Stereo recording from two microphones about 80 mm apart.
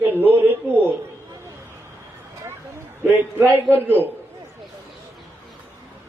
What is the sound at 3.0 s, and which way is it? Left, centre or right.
Speech, right.